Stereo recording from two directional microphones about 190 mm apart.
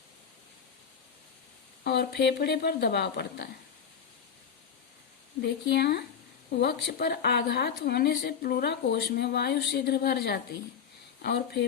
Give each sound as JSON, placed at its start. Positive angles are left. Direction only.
{"t": 1.8, "sound": "a woman's voice", "side_deg": 60}
{"t": 5.4, "sound": "a woman's voice", "side_deg": 60}